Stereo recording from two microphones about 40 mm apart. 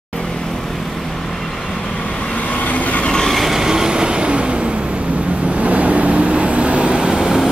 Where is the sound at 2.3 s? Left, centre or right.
Left.